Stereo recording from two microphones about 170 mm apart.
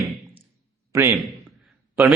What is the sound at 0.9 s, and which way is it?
Speech, 15° right (ahead or behind).